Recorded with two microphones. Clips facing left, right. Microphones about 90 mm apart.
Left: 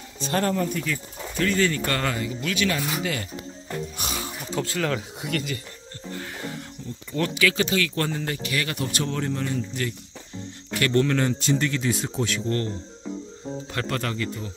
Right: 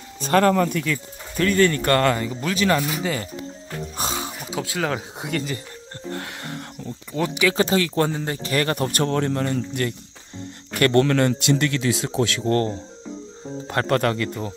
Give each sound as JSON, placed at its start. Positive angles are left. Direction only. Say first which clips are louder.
{"t": 0.2, "sound": "speech", "louder": "right 7 dB", "side_deg": -55}
{"t": 1.4, "sound": "speech", "louder": "right 5 dB", "side_deg": -50}
{"t": 2.2, "sound": "speech", "louder": "right 4 dB", "side_deg": -35}
{"t": 4.0, "sound": "music", "louder": "right 4 dB", "side_deg": -25}
{"t": 4.5, "sound": "speech", "louder": "even", "side_deg": -10}
{"t": 6.1, "sound": "music", "louder": "even", "side_deg": -65}
{"t": 7.1, "sound": "speech", "louder": "right 2 dB", "side_deg": -15}
{"t": 7.5, "sound": "speech", "louder": "right 5 dB", "side_deg": -35}
{"t": 12.4, "sound": "speech", "louder": "right 8 dB", "side_deg": -40}
{"t": 13.7, "sound": "speech", "louder": "right 9 dB", "side_deg": -50}